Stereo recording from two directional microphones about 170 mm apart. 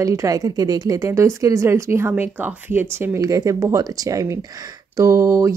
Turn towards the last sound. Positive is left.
turn(degrees=-20)  # may be behind; listen again after turning